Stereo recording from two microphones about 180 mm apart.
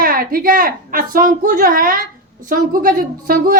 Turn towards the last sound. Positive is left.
turn(degrees=-55)  # may be behind; listen again after turning